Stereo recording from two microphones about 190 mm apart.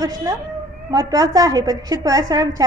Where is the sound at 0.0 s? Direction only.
20° right (ahead or behind).